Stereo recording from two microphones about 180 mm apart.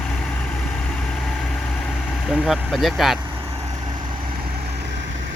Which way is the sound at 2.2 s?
Centre (ahead or behind).